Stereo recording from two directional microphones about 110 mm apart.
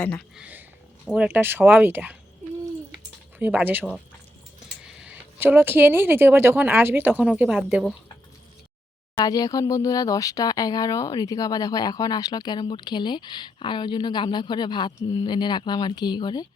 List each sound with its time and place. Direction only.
0.0 s speech: 10° left (ahead or behind)
0.3 s speech: 15° right (ahead or behind)
3.3 s speech: 15° right (ahead or behind)
4.8 s a sound: 10° right (ahead or behind)
5.4 s speech: 20° right (ahead or behind)
9.1 s speech: 35° left (ahead or behind)